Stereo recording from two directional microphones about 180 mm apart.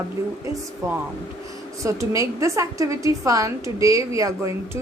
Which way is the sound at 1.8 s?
15° right (ahead or behind).